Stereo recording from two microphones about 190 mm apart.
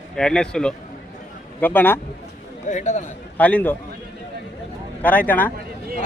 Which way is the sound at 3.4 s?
10° left (ahead or behind).